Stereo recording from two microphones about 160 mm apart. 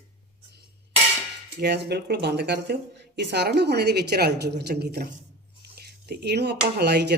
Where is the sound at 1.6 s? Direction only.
90° right.